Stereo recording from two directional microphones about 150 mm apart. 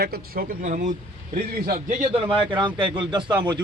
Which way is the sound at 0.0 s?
90° right.